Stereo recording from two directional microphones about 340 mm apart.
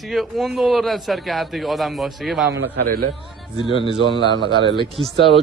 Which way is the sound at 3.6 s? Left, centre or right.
Centre.